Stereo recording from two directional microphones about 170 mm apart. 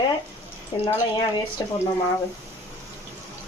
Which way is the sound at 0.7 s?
25° left (ahead or behind).